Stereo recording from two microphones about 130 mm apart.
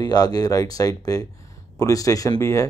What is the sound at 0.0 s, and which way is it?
Speech, 30° left (ahead or behind).